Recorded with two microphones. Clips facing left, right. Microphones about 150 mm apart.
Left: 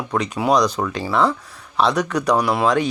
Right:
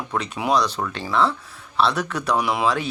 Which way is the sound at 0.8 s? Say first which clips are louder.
Left 3 dB; 10° left (ahead or behind).